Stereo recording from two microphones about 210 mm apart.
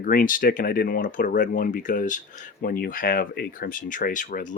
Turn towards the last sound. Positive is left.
turn(degrees=40)  # may be behind; listen again after turning